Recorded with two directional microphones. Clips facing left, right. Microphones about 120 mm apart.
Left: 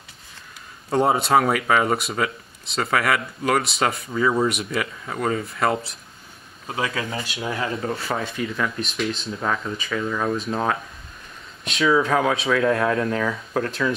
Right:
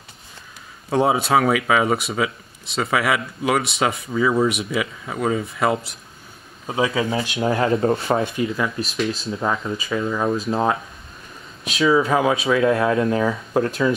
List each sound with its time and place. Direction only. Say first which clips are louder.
0.8 s speech: right 1 dB; centre (ahead or behind)
6.7 s speech: right 6 dB; 15° right (ahead or behind)
7.4 s speech: right 8 dB; 30° right (ahead or behind)
8.5 s speech: right 2 dB; 5° right (ahead or behind)
9.4 s speech: right 2 dB; 15° right (ahead or behind)
11.6 s speech: right 2 dB; 5° right (ahead or behind)